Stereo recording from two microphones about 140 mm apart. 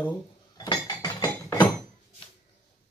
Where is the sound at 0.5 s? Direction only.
30° left (ahead or behind).